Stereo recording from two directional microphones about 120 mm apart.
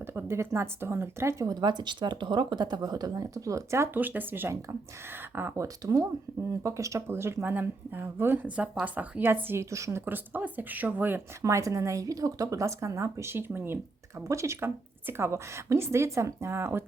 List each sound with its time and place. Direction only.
0.0 s a woman's voice: 20° right (ahead or behind)
11.4 s a woman's voice: 25° right (ahead or behind)